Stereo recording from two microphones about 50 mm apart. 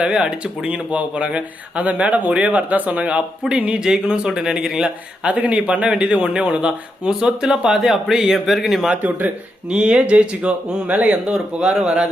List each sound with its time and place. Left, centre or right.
0.0 s speech: centre
5.2 s speech: right; by 8.9 s centre
8.9 s speech: right
9.6 s speech: right
10.8 s speech: right
11.1 s speech: centre